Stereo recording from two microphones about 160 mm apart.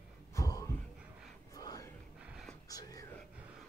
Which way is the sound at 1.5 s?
25° left (ahead or behind).